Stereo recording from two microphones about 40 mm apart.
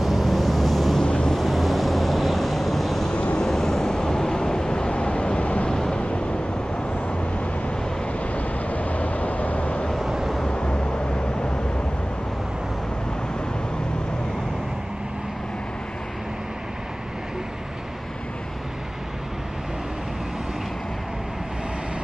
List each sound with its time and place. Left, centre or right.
0.0 s vehicle: centre
1.0 s wind noise: left
1.3 s vehicle: centre
3.1 s vehicle: left
3.4 s vehicle: centre; by 5.7 s left
5.7 s vehicle: centre
5.9 s vehicle: left
8.2 s vehicle: left
10.0 s vehicle: centre
10.4 s vehicle: left